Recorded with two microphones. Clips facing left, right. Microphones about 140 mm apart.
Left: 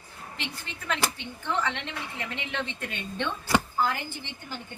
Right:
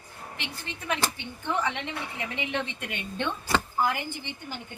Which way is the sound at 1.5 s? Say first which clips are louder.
Right 1 dB; 15° right (ahead or behind).